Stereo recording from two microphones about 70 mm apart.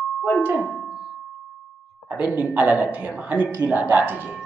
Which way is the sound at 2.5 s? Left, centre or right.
Right.